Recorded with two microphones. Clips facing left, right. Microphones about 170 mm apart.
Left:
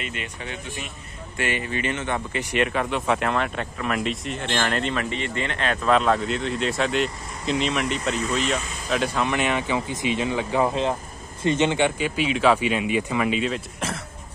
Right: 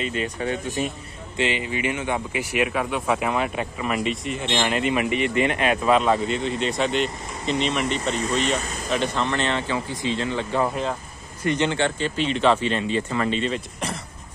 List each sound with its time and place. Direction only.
0.0 s speech: 35° right (ahead or behind)
1.3 s speech: 20° right (ahead or behind); by 14.0 s centre (ahead or behind)